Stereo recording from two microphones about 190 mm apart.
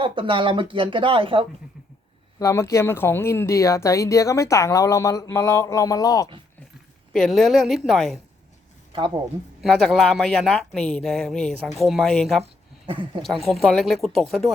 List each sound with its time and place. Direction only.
0.0 s speech: 25° right (ahead or behind)
2.4 s speech: 15° left (ahead or behind)
7.1 s speech: centre (ahead or behind)
8.9 s speech: 25° right (ahead or behind)
9.6 s speech: centre (ahead or behind)
12.4 s speech: 30° right (ahead or behind)
13.2 s speech: centre (ahead or behind)